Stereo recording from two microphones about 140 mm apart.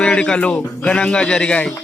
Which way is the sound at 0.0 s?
5° left (ahead or behind).